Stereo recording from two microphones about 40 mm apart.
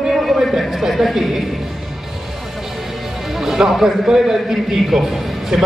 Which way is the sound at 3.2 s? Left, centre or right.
Centre.